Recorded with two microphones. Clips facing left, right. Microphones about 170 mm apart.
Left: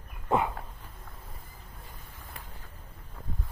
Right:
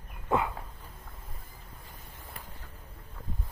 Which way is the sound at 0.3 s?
20° left (ahead or behind).